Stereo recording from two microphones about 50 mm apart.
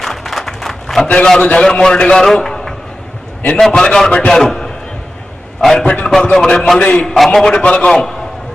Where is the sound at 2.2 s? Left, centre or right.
Centre.